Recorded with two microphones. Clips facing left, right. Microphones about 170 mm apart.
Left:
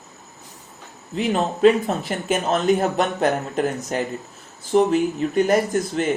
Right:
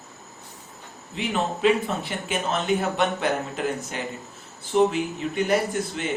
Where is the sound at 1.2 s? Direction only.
40° left (ahead or behind).